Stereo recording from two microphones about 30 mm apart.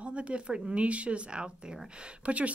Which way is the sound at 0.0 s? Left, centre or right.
Right.